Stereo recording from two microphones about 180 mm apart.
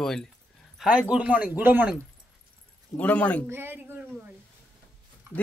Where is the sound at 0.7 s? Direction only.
5° right (ahead or behind).